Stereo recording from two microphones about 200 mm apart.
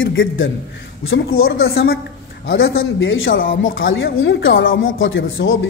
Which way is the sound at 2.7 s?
75° left (ahead or behind).